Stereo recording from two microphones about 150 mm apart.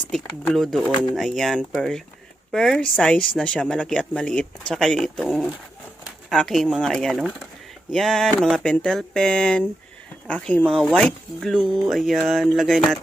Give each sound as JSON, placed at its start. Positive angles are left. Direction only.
{"t": 0.5, "sound": "a woman's voice", "side_deg": 0}